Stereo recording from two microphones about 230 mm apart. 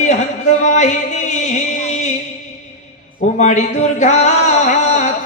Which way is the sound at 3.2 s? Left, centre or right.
Left.